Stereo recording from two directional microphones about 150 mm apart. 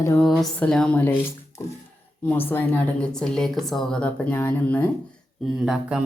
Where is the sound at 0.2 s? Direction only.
5° left (ahead or behind).